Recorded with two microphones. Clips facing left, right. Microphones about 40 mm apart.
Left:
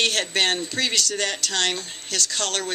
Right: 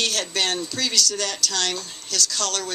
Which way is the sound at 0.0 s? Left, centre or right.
Left.